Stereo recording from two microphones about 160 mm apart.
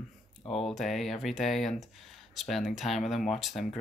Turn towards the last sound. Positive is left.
turn(degrees=0)  # may be behind; listen again after turning